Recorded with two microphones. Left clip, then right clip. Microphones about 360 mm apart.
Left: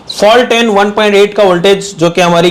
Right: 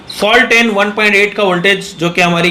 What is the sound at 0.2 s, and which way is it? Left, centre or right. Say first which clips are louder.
Speech: left 2 dB; left.